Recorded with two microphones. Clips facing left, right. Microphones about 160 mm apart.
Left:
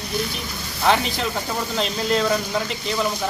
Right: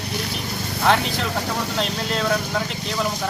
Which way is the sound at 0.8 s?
Centre (ahead or behind).